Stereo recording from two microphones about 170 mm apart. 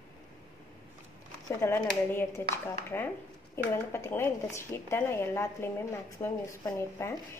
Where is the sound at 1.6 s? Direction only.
15° left (ahead or behind).